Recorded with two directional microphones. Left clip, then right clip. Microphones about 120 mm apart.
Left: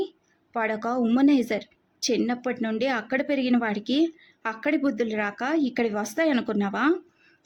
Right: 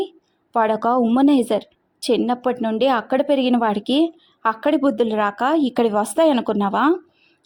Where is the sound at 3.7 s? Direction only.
35° right (ahead or behind).